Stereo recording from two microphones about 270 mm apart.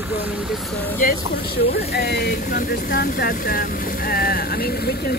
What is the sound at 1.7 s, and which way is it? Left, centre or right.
Speech, left.